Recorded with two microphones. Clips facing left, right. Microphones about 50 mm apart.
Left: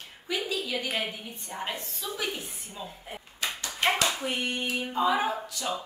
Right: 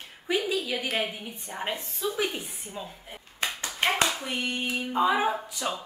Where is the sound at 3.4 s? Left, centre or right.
Right.